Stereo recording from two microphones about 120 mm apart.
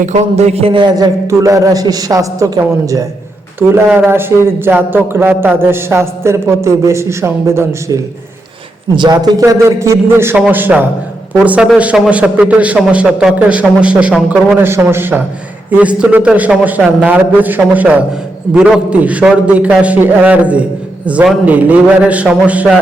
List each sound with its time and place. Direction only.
0.0 s a man's voice: 70° right (ahead or behind); by 9.4 s 35° right (ahead or behind)
9.4 s a man's voice: 25° right (ahead or behind)